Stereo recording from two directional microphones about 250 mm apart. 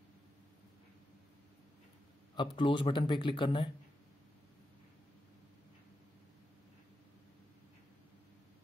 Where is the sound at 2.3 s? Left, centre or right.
Centre.